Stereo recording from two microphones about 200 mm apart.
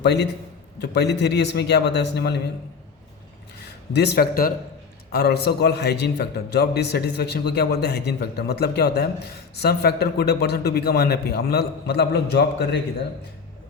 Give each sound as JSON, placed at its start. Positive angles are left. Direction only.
{"t": 0.8, "sound": "a man's voice", "side_deg": 55}
{"t": 3.9, "sound": "a man's voice", "side_deg": 55}